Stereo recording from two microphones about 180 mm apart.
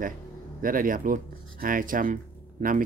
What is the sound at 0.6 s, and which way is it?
Speech, 50° right (ahead or behind).